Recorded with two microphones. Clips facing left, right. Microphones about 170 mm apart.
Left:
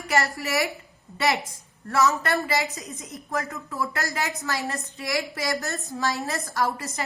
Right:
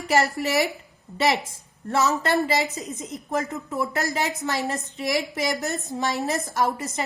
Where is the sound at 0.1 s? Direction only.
20° right (ahead or behind).